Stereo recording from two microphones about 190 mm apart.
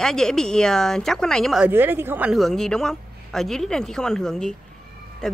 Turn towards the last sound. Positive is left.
turn(degrees=5)  # may be behind; listen again after turning